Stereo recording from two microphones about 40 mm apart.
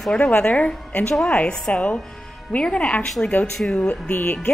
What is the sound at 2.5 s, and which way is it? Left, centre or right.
A woman's voice, left.